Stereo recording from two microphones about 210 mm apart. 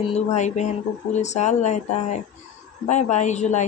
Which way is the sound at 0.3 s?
35° left (ahead or behind).